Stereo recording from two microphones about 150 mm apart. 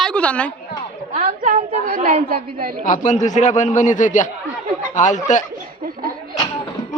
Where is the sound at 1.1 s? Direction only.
60° right (ahead or behind).